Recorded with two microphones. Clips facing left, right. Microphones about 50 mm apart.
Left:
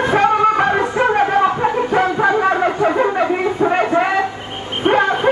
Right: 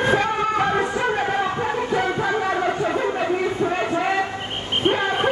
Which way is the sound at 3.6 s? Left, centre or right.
Left.